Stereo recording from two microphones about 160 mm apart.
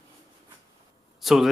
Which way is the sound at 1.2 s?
Centre (ahead or behind).